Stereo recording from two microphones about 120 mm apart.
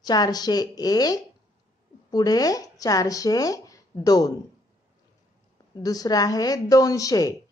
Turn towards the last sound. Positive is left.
turn(degrees=30)  # may be behind; listen again after turning